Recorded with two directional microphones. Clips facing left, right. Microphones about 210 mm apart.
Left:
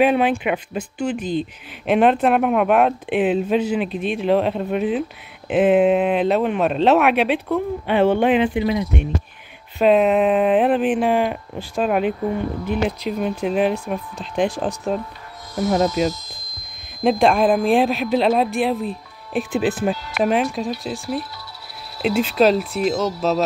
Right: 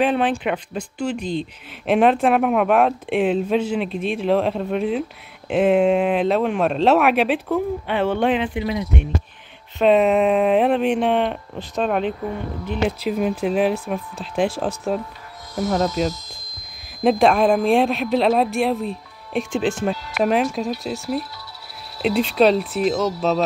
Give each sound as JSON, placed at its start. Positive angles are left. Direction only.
{"t": 0.0, "sound": "speech", "side_deg": 10}
{"t": 7.8, "sound": "speech", "side_deg": 15}
{"t": 9.8, "sound": "speech", "side_deg": 0}
{"t": 22.0, "sound": "speech", "side_deg": 0}